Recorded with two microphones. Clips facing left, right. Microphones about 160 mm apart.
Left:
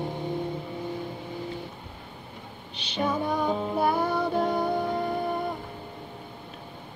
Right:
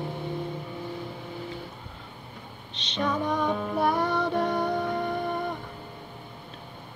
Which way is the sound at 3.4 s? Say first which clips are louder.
Left 1 dB; 25° left (ahead or behind).